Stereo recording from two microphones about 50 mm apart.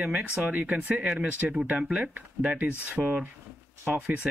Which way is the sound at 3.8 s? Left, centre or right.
Right.